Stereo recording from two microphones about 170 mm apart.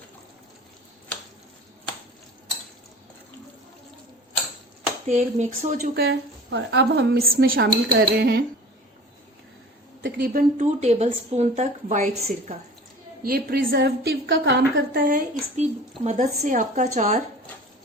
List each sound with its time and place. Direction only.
5.0 s speech: 45° right (ahead or behind)
5.9 s a woman's voice: 70° right (ahead or behind)
10.0 s speech: 55° right (ahead or behind); by 12.5 s 40° right (ahead or behind)
13.2 s a woman's voice: 65° right (ahead or behind); by 15.0 s 90° right
15.0 s speech: 50° right (ahead or behind)